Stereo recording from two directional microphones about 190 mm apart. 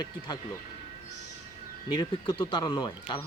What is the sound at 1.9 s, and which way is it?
Speech, 25° left (ahead or behind).